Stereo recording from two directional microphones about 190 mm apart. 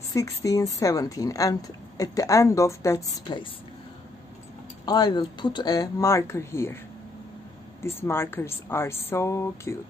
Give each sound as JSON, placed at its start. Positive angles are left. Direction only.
{"t": 0.1, "sound": "a woman's voice", "side_deg": 15}
{"t": 4.8, "sound": "speech", "side_deg": 20}
{"t": 7.8, "sound": "a woman's voice", "side_deg": 15}